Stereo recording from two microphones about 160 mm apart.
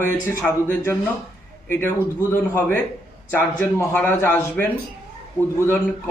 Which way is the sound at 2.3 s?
10° left (ahead or behind).